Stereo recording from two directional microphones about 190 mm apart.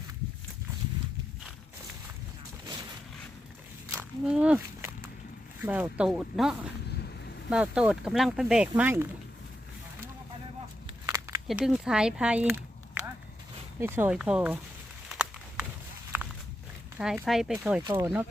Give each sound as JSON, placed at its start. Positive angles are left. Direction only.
{"t": 3.8, "sound": "walk", "side_deg": -5}
{"t": 5.6, "sound": "speech", "side_deg": -10}
{"t": 11.0, "sound": "a sound", "side_deg": -15}
{"t": 11.4, "sound": "speech", "side_deg": -5}
{"t": 13.7, "sound": "speech", "side_deg": -10}
{"t": 15.1, "sound": "a sound", "side_deg": -5}
{"t": 16.1, "sound": "walk", "side_deg": -10}
{"t": 17.0, "sound": "speech", "side_deg": -5}
{"t": 17.8, "sound": "speech", "side_deg": -20}